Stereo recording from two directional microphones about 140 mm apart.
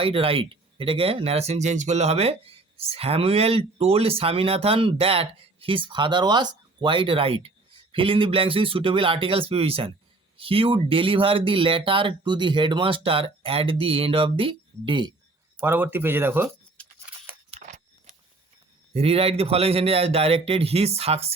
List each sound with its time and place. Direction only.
0.0 s speech: 40° right (ahead or behind)
15.6 s speech: 15° right (ahead or behind)
16.8 s a sound: 10° left (ahead or behind)
18.9 s speech: 45° right (ahead or behind)